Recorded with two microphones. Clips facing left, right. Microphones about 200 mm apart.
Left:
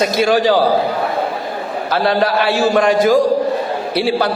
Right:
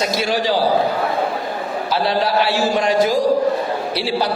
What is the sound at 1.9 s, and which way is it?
A man's voice, 55° left (ahead or behind).